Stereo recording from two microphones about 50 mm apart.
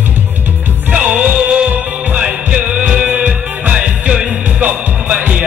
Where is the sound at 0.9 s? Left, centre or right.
Right.